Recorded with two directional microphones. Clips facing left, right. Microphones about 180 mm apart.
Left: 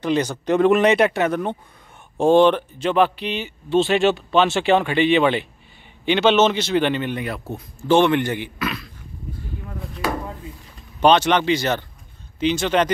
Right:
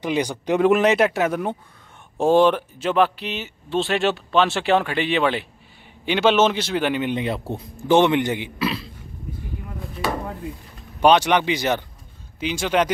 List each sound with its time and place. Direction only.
0.0 s speech: 10° right (ahead or behind)
8.5 s a man's voice: 30° right (ahead or behind)
11.0 s speech: 10° right (ahead or behind)